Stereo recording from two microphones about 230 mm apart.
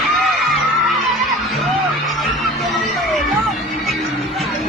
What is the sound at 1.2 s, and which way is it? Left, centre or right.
Music, centre.